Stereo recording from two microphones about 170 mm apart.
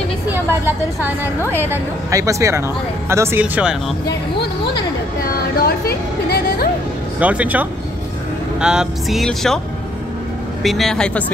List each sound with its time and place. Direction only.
0.3 s a woman's voice: 10° right (ahead or behind)
5.6 s speech: 65° left (ahead or behind)
7.2 s a woman's voice: 10° right (ahead or behind)
10.6 s speech: centre (ahead or behind)